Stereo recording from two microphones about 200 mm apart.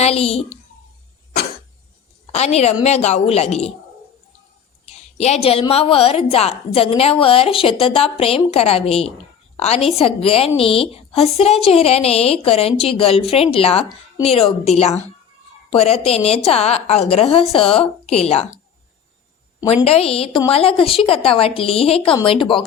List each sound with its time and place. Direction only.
0.0 s a woman's voice: 30° left (ahead or behind)
2.3 s a woman's voice: 30° left (ahead or behind)
4.9 s a woman's voice: 30° left (ahead or behind)
19.6 s a woman's voice: 30° left (ahead or behind)